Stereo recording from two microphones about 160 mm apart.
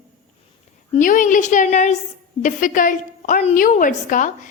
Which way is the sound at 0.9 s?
55° left (ahead or behind).